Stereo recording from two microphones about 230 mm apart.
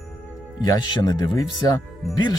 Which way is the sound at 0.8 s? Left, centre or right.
Centre.